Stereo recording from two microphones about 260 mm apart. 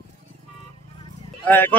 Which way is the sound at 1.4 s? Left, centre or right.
Centre.